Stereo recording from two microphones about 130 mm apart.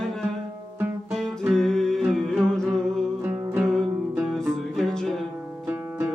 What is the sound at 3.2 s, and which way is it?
Music, 10° right (ahead or behind).